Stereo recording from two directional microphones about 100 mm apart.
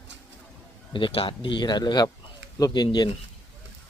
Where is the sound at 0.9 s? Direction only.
65° left (ahead or behind); by 3.0 s 45° left (ahead or behind).